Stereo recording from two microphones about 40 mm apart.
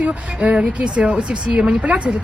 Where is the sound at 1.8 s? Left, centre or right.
Right.